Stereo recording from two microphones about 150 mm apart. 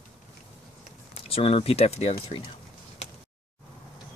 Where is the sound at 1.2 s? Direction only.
40° left (ahead or behind).